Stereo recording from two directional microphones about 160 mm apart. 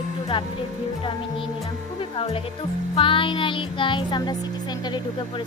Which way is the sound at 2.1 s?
35° left (ahead or behind).